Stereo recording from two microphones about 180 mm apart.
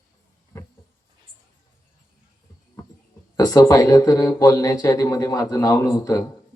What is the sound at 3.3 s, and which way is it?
Speech, 20° left (ahead or behind).